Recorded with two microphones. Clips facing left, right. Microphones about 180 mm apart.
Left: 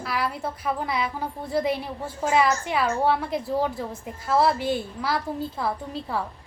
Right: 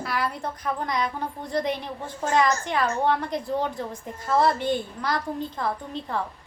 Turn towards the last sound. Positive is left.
turn(degrees=5)  # may be behind; listen again after turning